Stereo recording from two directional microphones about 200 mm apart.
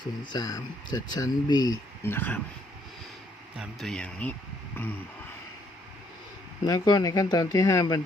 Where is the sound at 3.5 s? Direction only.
Centre (ahead or behind).